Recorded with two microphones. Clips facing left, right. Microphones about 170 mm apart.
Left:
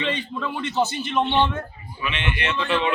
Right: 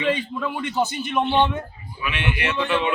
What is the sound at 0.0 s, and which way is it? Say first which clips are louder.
A man's voice: right 3 dB; 10° right (ahead or behind).